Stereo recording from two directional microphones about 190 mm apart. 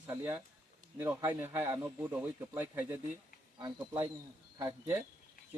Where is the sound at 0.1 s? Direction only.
10° right (ahead or behind).